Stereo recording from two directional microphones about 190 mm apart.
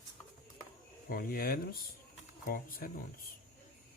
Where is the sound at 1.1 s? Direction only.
50° left (ahead or behind).